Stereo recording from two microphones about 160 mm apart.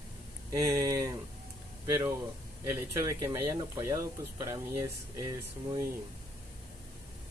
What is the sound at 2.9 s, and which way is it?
Speech, 20° right (ahead or behind).